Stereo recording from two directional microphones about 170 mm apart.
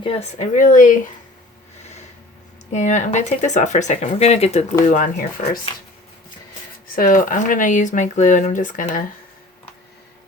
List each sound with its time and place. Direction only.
0.0 s speech: 35° left (ahead or behind)
2.7 s speech: 45° left (ahead or behind)
6.9 s speech: 55° left (ahead or behind)